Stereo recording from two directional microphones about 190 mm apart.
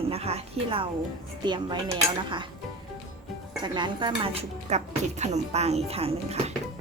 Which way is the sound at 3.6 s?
25° right (ahead or behind).